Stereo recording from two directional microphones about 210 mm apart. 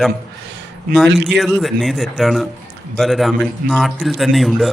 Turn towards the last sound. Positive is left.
turn(degrees=0)  # may be behind; listen again after turning